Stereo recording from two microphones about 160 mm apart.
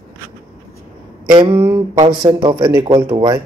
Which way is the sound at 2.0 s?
30° right (ahead or behind).